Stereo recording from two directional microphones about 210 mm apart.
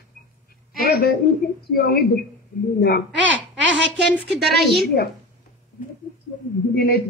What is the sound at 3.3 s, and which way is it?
Speech, 60° right (ahead or behind).